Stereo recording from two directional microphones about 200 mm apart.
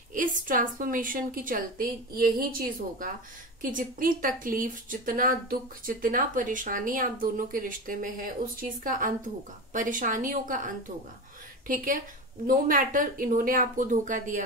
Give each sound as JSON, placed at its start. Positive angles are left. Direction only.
{"t": 0.1, "sound": "speech", "side_deg": -40}
{"t": 3.7, "sound": "a woman's voice", "side_deg": -45}